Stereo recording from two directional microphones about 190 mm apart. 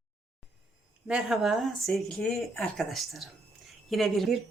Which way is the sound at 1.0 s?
5° right (ahead or behind).